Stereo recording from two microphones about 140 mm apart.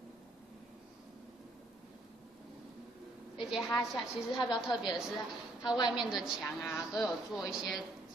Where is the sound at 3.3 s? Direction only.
5° right (ahead or behind).